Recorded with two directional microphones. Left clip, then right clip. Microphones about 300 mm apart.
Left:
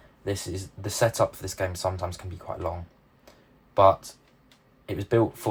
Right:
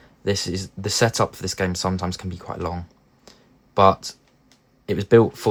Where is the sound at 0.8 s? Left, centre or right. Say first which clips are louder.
Right 3 dB; right.